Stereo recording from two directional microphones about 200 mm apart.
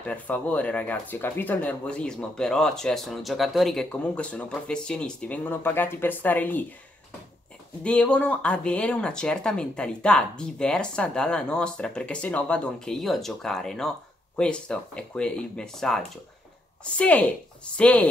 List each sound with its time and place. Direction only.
0.0 s speech: 5° left (ahead or behind)
7.8 s speech: 5° left (ahead or behind)